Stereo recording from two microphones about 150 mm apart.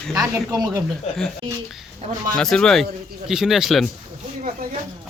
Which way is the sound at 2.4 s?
5° left (ahead or behind).